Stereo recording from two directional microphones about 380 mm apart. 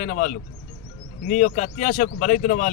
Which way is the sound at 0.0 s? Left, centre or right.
Centre.